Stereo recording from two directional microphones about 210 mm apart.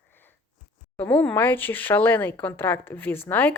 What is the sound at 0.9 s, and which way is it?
A woman's voice, 10° left (ahead or behind).